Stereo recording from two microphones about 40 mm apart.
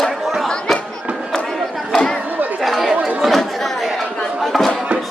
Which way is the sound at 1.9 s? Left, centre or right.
Centre.